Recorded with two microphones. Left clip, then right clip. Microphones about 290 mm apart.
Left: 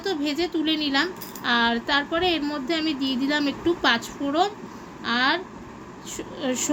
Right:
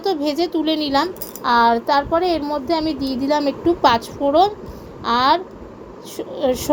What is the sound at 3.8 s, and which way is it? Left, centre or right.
A woman's voice, centre.